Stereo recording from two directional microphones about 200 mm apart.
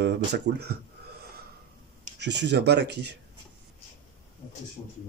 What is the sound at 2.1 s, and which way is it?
Speech, 60° right (ahead or behind).